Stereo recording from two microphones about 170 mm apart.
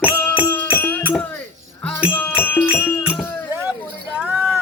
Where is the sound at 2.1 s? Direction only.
10° left (ahead or behind).